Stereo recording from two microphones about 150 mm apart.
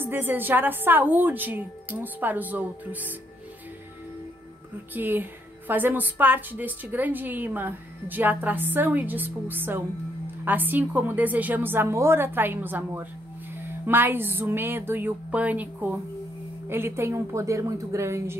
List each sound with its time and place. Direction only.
0.0 s a woman's voice: 15° right (ahead or behind)
4.9 s a woman's voice: 15° right (ahead or behind)